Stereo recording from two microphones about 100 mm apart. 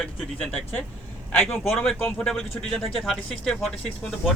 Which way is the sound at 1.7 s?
5° left (ahead or behind).